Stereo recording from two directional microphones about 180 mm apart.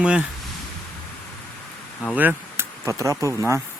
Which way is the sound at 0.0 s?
5° right (ahead or behind).